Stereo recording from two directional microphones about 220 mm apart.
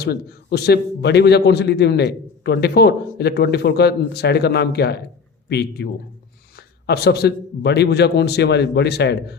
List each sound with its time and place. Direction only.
0.0 s a man's voice: 45° left (ahead or behind)